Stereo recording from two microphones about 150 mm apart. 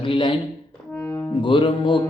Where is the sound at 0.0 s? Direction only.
35° left (ahead or behind).